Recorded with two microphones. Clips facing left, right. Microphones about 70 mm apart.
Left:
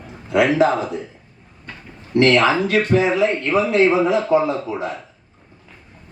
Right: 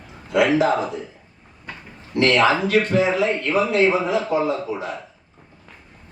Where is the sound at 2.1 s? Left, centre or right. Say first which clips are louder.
Left 2 dB; left.